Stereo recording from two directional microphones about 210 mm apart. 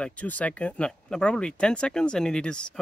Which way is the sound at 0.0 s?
5° left (ahead or behind).